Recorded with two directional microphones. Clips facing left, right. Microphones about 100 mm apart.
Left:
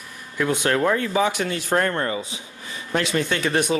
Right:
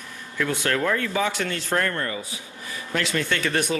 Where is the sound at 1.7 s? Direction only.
25° left (ahead or behind).